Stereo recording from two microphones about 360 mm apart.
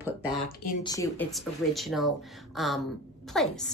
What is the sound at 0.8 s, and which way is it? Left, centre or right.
A woman's voice, centre.